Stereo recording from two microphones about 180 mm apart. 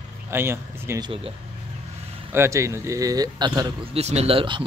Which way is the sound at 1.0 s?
30° right (ahead or behind).